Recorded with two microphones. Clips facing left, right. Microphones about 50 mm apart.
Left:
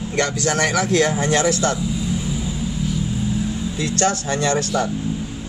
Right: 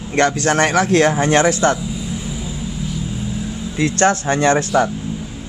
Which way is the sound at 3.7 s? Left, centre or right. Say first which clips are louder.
Right 7 dB; right.